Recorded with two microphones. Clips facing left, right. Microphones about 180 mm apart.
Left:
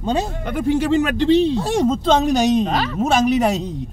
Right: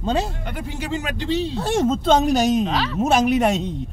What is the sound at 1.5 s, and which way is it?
Speech, 15° left (ahead or behind).